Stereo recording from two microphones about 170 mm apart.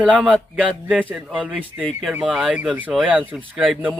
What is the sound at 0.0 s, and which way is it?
Speech, 5° right (ahead or behind).